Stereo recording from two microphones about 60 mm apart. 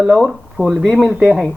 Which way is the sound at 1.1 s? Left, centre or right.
Centre.